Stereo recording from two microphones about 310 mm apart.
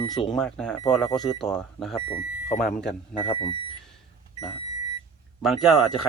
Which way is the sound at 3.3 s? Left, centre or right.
Centre.